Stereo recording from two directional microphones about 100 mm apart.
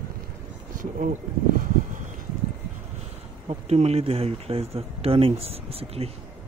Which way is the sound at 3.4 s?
90° right.